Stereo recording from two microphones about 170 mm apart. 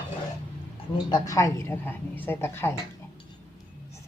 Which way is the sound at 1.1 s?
20° left (ahead or behind).